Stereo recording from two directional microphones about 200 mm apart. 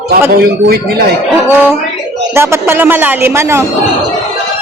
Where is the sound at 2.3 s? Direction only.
15° right (ahead or behind).